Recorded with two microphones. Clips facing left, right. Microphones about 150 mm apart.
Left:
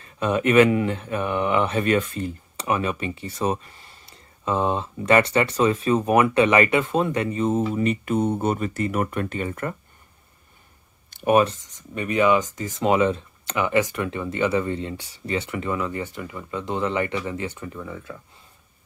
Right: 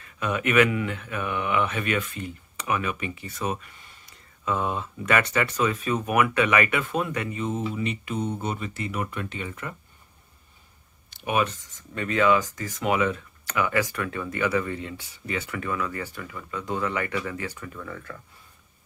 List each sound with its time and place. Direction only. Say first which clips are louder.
0.0 s speech: left 5 dB; 30° left (ahead or behind); by 9.8 s 50° left (ahead or behind)
11.1 s a sound: left 7 dB; 45° left (ahead or behind)
11.6 s speech: left 2 dB; 20° left (ahead or behind)
17.8 s speech: left 3 dB; 10° left (ahead or behind)